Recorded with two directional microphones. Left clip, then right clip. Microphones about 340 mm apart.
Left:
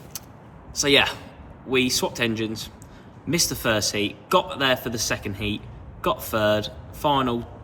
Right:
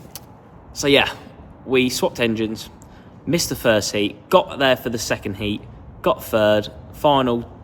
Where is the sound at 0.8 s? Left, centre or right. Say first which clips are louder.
Right 2 dB; centre.